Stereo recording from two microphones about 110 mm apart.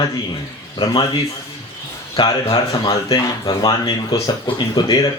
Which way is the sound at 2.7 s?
35° left (ahead or behind).